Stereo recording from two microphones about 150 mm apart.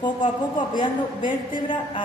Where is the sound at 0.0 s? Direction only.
30° left (ahead or behind).